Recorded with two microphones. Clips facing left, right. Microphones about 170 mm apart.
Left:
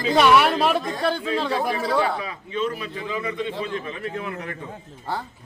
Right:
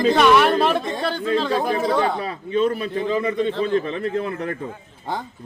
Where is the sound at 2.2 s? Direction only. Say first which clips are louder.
Right 6 dB; 40° right (ahead or behind).